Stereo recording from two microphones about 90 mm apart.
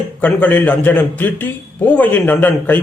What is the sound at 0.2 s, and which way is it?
Speech, 15° left (ahead or behind).